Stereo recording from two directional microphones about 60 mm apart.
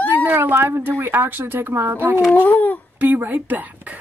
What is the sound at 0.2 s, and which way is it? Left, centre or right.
Speech, right.